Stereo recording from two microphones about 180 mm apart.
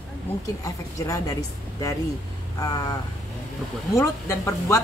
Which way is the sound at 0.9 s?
20° left (ahead or behind).